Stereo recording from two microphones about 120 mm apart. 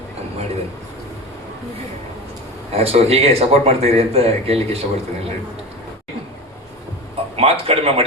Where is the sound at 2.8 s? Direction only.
55° right (ahead or behind).